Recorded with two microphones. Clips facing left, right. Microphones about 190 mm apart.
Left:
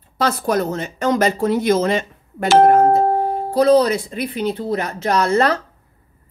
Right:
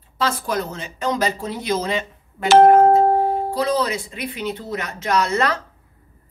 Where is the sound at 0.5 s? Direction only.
45° left (ahead or behind).